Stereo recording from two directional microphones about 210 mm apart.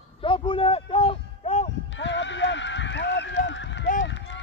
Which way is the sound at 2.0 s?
60° left (ahead or behind).